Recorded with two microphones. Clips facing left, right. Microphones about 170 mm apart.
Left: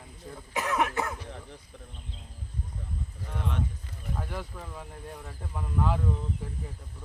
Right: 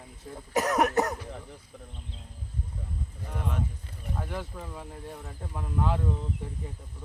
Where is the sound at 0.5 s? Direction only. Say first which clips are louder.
Right 4 dB; 40° right (ahead or behind).